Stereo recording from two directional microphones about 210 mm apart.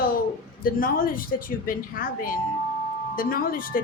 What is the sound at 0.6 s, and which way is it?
A woman's voice, 45° left (ahead or behind).